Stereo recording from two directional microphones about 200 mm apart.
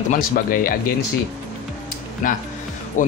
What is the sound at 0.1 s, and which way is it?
Speech, 45° left (ahead or behind).